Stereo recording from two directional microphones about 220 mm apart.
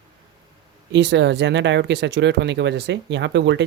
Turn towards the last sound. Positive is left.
turn(degrees=-55)  # may be behind; listen again after turning